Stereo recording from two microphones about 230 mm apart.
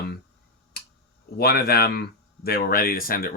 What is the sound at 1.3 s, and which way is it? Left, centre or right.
Speech, left.